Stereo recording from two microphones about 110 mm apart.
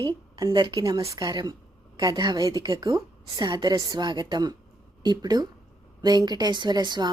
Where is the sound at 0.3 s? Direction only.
35° right (ahead or behind).